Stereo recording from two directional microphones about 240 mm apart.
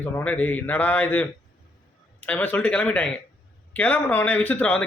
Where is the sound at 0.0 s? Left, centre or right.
Centre.